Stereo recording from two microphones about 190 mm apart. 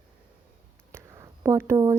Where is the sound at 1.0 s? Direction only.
15° right (ahead or behind).